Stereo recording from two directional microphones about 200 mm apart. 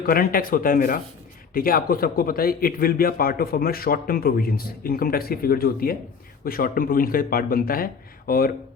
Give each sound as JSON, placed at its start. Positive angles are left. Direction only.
{"t": 0.0, "sound": "a man's voice", "side_deg": 45}